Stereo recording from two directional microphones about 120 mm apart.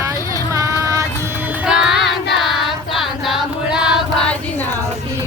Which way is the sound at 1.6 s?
5° right (ahead or behind).